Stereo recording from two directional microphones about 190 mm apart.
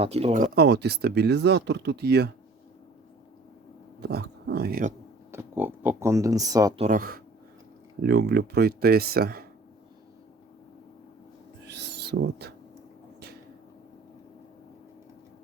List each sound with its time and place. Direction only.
0.0 s speech: 30° right (ahead or behind)
0.5 s speech: 60° right (ahead or behind)
4.0 s speech: 55° right (ahead or behind)
5.3 s speech: 10° right (ahead or behind)
6.7 s speech: 40° right (ahead or behind)
8.0 s speech: 60° right (ahead or behind)
11.7 s owl: 65° right (ahead or behind)